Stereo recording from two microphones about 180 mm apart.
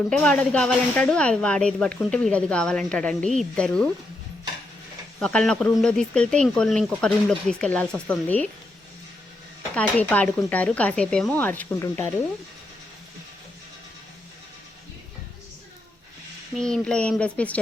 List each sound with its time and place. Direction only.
0.1 s speech: 5° left (ahead or behind)
5.2 s speech: 5° left (ahead or behind)
9.7 s speech: 5° left (ahead or behind)
16.6 s speech: 5° left (ahead or behind)